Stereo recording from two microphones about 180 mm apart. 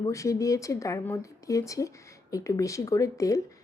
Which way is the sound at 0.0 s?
15° left (ahead or behind).